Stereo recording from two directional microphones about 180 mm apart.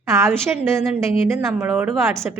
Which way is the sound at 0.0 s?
15° right (ahead or behind).